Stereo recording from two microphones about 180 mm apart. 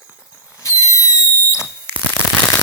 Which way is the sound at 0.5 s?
15° left (ahead or behind).